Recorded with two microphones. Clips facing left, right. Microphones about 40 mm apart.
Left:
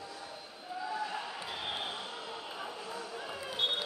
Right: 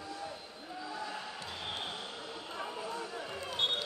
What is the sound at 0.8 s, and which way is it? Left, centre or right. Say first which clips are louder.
Basketball bounce: left 4 dB; centre.